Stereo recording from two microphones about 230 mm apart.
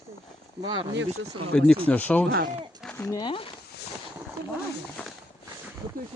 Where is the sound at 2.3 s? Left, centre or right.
Right.